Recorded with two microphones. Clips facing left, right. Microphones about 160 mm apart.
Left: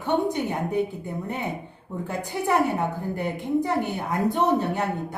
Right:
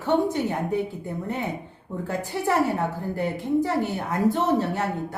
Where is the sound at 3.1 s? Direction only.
20° left (ahead or behind).